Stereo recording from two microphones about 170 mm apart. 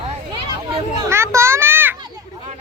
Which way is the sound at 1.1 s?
15° right (ahead or behind).